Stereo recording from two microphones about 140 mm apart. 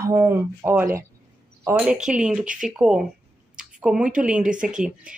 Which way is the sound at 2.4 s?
70° right (ahead or behind).